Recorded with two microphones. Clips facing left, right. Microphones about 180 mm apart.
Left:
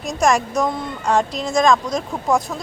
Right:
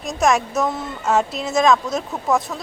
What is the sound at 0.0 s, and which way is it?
Speech, centre (ahead or behind).